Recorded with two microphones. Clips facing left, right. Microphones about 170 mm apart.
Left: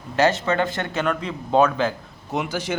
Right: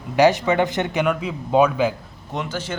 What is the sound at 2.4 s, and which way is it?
Speech, 10° left (ahead or behind).